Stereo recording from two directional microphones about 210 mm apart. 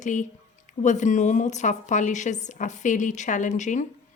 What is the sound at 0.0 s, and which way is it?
A woman's voice, 35° left (ahead or behind).